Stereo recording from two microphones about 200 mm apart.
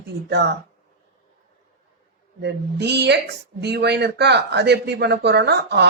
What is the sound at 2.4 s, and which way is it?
Speech, 55° right (ahead or behind).